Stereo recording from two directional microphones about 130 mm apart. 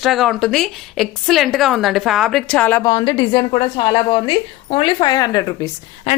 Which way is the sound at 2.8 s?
35° left (ahead or behind).